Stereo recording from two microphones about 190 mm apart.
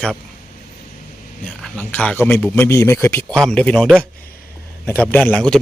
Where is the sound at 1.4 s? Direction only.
5° left (ahead or behind).